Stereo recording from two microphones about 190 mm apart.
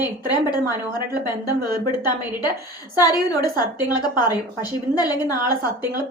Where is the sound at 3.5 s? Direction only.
20° left (ahead or behind).